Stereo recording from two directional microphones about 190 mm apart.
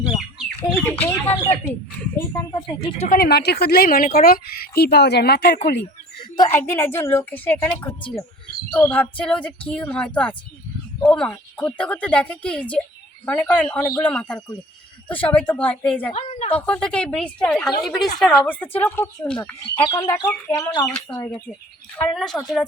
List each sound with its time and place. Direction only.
0.3 s a woman's voice: 5° left (ahead or behind); by 3.1 s 30° left (ahead or behind)
3.1 s a woman's voice: 50° left (ahead or behind)
6.3 s a woman's voice: 15° left (ahead or behind)
16.1 s a woman's voice: 35° left (ahead or behind)
16.6 s a woman's voice: 5° left (ahead or behind)
19.9 s a woman's voice: 20° left (ahead or behind)
21.9 s speech: 5° left (ahead or behind)